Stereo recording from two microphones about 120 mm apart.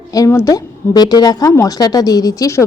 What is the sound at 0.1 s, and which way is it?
A woman's voice, 25° left (ahead or behind).